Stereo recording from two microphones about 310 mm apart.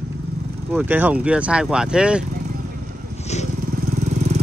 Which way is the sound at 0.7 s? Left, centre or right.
Centre.